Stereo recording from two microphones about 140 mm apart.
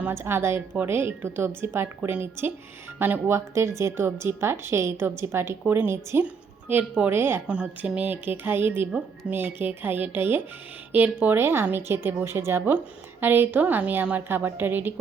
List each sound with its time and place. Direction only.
0.0 s speech: 20° right (ahead or behind)